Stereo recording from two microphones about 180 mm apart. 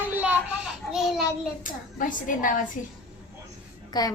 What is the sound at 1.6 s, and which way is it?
Speech, 45° left (ahead or behind).